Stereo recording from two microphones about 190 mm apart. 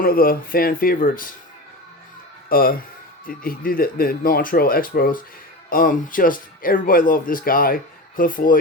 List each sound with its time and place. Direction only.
0.0 s speech: 50° left (ahead or behind)
2.5 s speech: 50° left (ahead or behind)